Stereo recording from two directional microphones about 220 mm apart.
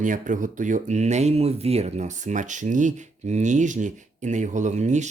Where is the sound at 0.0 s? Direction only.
35° right (ahead or behind).